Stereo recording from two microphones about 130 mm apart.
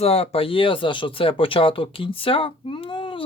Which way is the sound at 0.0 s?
50° left (ahead or behind).